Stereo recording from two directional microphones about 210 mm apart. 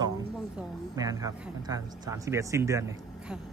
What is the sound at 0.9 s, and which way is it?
Speech, 15° right (ahead or behind).